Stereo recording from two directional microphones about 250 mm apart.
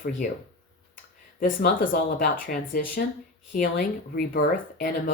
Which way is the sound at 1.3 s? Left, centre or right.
Left.